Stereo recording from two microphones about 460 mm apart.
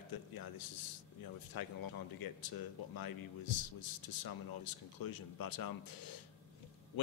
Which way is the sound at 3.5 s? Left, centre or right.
Left.